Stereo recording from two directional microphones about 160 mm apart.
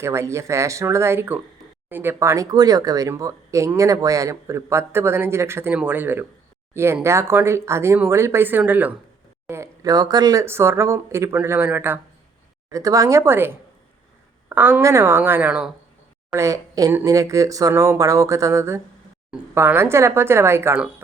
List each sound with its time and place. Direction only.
0.0 s speech: 15° right (ahead or behind)
14.5 s speech: 15° right (ahead or behind)
16.3 s speech: 20° right (ahead or behind)